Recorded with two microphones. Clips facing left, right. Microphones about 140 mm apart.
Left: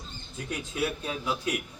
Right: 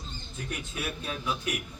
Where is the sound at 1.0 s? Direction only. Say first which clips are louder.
Left 2 dB; 15° left (ahead or behind).